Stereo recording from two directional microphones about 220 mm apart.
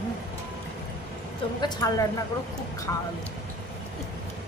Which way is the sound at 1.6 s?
15° left (ahead or behind).